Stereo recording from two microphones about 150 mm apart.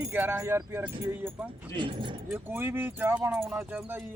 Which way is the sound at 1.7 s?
35° right (ahead or behind).